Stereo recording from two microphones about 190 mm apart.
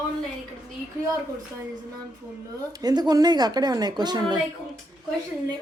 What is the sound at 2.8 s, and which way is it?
A woman's voice, 20° right (ahead or behind).